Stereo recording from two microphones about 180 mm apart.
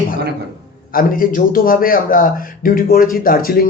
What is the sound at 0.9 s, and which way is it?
A man's voice, 50° left (ahead or behind).